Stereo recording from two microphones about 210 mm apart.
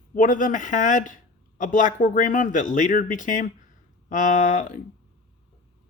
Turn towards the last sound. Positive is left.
turn(degrees=40)  # may be behind; listen again after turning